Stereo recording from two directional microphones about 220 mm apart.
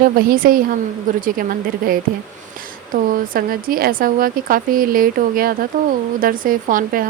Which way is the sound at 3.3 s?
40° right (ahead or behind).